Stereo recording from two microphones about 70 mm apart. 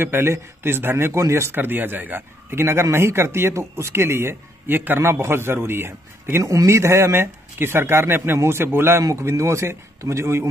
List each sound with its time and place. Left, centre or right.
0.0 s a man's voice: right
9.0 s speech: right